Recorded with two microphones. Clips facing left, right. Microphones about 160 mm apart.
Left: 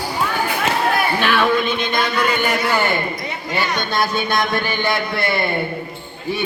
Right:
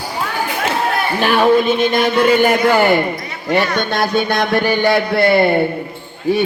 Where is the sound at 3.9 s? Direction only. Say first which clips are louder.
Right 4 dB; 65° right (ahead or behind).